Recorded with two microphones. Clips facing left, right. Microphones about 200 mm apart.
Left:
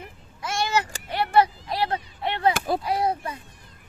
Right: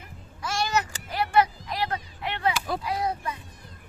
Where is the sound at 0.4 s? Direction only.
25° left (ahead or behind).